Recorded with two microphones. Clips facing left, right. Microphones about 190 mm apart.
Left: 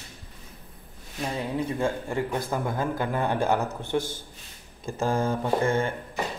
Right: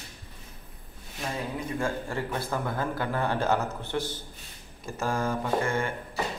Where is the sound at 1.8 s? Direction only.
15° left (ahead or behind).